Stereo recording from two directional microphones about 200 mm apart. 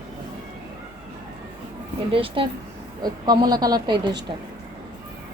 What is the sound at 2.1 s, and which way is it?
Speech, 25° right (ahead or behind).